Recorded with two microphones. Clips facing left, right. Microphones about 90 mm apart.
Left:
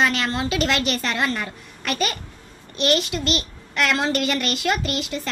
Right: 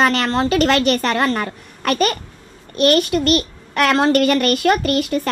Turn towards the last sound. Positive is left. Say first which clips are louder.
# right 8 dB
turn(degrees=-50)  # may be behind; listen again after turning